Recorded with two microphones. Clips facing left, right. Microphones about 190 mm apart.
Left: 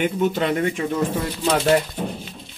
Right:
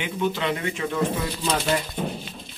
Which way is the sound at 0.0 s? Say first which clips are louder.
Left 5 dB; 50° left (ahead or behind).